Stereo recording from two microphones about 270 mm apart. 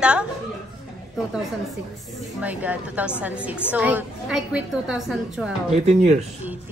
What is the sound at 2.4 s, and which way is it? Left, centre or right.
A woman's voice, centre.